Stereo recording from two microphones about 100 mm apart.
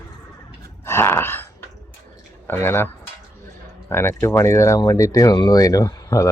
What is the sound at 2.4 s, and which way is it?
Speech, 25° left (ahead or behind).